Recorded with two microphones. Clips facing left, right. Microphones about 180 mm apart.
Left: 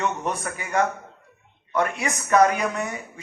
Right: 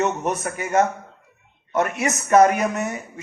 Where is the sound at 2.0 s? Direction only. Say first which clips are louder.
Right 4 dB; 25° right (ahead or behind).